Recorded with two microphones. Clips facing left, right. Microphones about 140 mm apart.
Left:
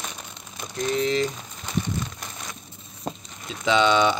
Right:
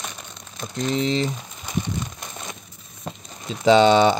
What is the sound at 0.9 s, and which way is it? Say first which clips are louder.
Speech: right 1 dB; 25° right (ahead or behind).